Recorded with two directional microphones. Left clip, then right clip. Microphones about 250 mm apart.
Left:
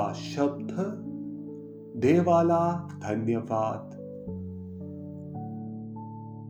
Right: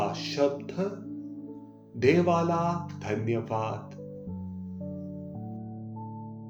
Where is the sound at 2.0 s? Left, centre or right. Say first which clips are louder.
Left 2 dB; left.